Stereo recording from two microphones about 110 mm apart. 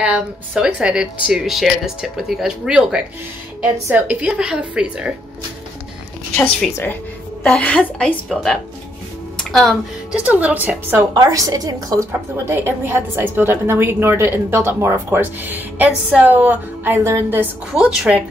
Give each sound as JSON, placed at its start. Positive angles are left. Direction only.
{"t": 0.0, "sound": "a woman's voice", "side_deg": -10}
{"t": 6.3, "sound": "a woman's voice", "side_deg": 5}
{"t": 6.7, "sound": "a woman's voice", "side_deg": 20}
{"t": 9.4, "sound": "music", "side_deg": 0}
{"t": 10.1, "sound": "a woman's voice", "side_deg": -15}
{"t": 11.0, "sound": "a woman's voice", "side_deg": -30}
{"t": 12.1, "sound": "a woman's voice", "side_deg": -20}
{"t": 17.7, "sound": "a woman's voice", "side_deg": -5}